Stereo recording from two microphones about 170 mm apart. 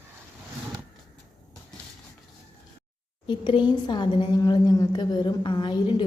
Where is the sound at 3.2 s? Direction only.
30° left (ahead or behind).